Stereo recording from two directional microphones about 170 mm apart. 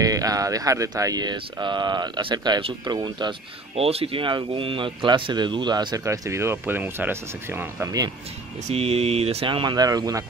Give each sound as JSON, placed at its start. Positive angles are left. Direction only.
{"t": 0.0, "sound": "speech", "side_deg": -20}
{"t": 8.6, "sound": "speech", "side_deg": -35}